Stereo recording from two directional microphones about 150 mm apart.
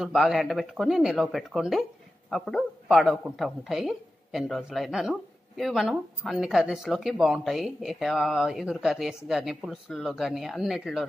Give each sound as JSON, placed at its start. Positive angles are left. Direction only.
{"t": 0.0, "sound": "a woman's voice", "side_deg": -5}